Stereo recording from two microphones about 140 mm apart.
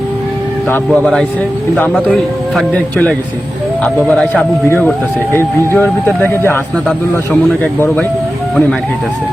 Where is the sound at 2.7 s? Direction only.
10° left (ahead or behind).